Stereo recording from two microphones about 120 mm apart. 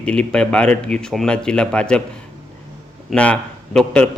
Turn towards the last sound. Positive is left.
turn(degrees=10)  # may be behind; listen again after turning